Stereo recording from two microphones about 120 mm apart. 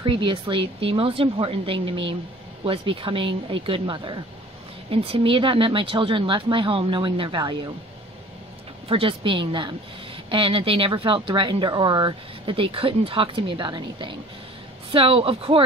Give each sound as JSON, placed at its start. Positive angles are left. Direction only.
{"t": 0.0, "sound": "speech", "side_deg": -45}
{"t": 8.8, "sound": "speech", "side_deg": -50}